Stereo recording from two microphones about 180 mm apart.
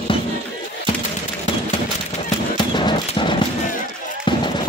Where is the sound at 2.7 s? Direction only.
25° left (ahead or behind).